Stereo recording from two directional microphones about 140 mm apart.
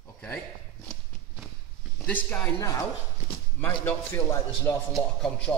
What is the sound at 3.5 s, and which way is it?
Speech, 15° left (ahead or behind).